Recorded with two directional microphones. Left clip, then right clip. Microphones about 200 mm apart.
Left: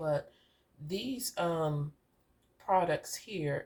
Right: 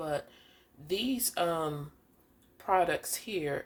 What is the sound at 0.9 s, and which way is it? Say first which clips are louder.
Speech: right 5 dB; 45° right (ahead or behind).